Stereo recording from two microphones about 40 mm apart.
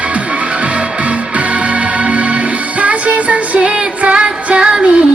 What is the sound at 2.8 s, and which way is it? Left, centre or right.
Music, right.